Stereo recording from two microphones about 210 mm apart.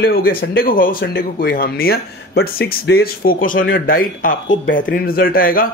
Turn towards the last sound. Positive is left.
turn(degrees=45)  # may be behind; listen again after turning